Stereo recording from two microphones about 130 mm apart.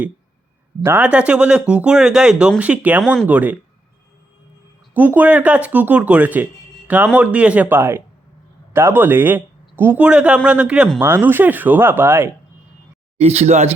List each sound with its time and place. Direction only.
0.8 s a man's voice: 20° right (ahead or behind)
1.0 s speech: 10° right (ahead or behind)
4.9 s speech: 15° right (ahead or behind)
13.1 s speech: 55° right (ahead or behind)